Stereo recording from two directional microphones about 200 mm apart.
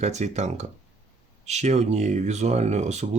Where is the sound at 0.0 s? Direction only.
35° right (ahead or behind).